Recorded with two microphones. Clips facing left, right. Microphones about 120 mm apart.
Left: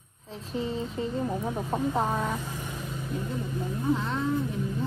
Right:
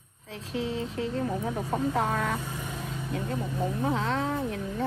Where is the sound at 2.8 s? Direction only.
70° right (ahead or behind).